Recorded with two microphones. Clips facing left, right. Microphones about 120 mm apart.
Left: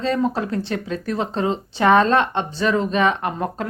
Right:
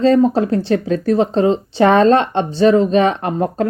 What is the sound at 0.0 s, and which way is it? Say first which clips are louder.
Speech: right 9 dB; 35° right (ahead or behind).